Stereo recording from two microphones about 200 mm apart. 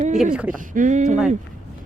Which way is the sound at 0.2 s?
5° right (ahead or behind).